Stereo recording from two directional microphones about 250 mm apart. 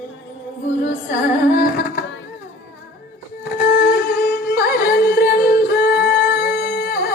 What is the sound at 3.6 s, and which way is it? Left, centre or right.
Music, left.